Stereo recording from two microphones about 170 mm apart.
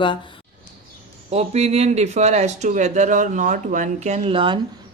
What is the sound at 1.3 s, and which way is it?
Speech, 40° right (ahead or behind).